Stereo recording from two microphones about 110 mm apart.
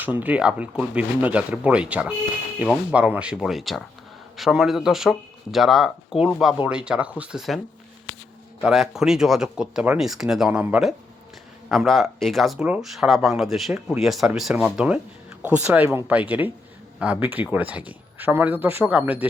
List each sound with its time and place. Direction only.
0.0 s speech: 15° right (ahead or behind)
8.6 s speech: centre (ahead or behind)